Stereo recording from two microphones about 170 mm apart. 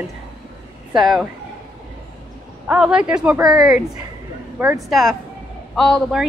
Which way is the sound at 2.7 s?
5° right (ahead or behind).